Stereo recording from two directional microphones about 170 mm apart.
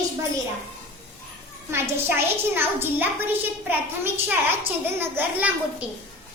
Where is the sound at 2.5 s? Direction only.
10° right (ahead or behind).